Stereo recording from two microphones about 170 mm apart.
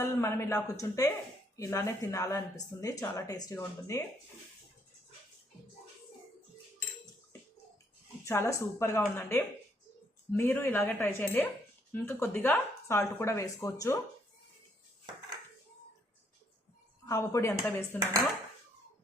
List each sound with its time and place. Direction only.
0.0 s speech: 15° left (ahead or behind)
8.2 s speech: 15° left (ahead or behind)
17.1 s speech: 20° left (ahead or behind)